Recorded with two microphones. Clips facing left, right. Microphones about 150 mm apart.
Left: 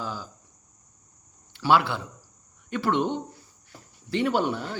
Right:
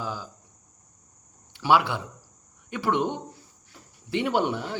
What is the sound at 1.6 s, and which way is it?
Speech, 15° right (ahead or behind).